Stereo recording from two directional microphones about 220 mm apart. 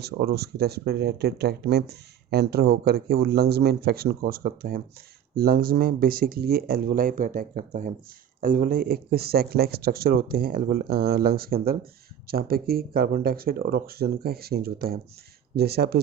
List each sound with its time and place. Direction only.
0.0 s speech: 45° right (ahead or behind)